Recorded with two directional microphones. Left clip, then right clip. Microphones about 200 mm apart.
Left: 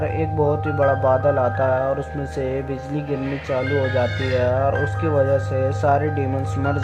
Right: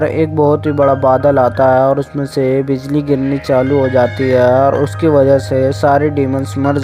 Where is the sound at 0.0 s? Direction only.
35° right (ahead or behind).